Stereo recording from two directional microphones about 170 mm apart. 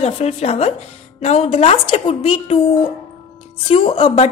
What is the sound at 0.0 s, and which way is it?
A woman's voice, 40° left (ahead or behind).